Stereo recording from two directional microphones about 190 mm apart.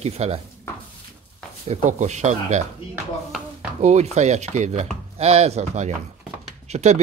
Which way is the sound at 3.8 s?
35° right (ahead or behind).